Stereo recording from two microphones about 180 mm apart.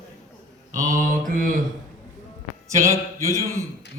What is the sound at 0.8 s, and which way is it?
Speech, 45° right (ahead or behind).